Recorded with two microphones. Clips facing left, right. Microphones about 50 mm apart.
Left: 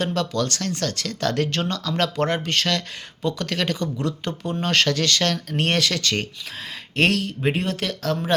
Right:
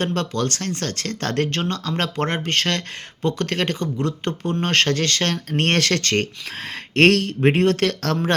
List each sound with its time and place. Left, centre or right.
0.0 s speech: right
6.9 s speech: right